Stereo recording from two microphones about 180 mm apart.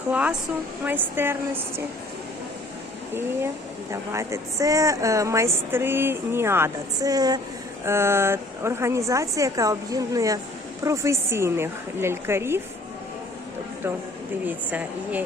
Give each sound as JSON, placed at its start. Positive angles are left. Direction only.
{"t": 0.1, "sound": "a woman's voice", "side_deg": -5}
{"t": 3.9, "sound": "a woman's voice", "side_deg": -15}
{"t": 14.4, "sound": "a woman's voice", "side_deg": -10}